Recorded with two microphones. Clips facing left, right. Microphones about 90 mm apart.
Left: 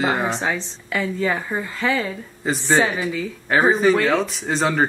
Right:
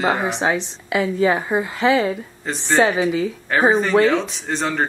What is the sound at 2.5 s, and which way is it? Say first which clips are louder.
Speech: right 1 dB; 5° left (ahead or behind).